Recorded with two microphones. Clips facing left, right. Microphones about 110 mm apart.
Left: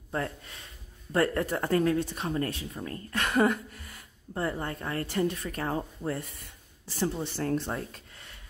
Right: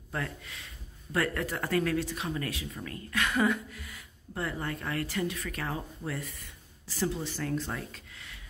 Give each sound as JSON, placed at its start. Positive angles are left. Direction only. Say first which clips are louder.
{"t": 1.1, "sound": "speech", "louder": "left 4 dB", "side_deg": 30}
{"t": 4.3, "sound": "speech", "louder": "left 3 dB", "side_deg": 30}